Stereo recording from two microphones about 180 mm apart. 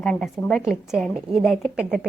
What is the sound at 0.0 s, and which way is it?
A woman's voice, 5° left (ahead or behind).